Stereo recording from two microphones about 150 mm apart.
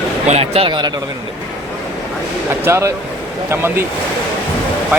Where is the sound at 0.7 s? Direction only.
30° right (ahead or behind).